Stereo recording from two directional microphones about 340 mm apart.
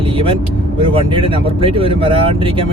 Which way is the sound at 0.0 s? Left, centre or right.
Centre.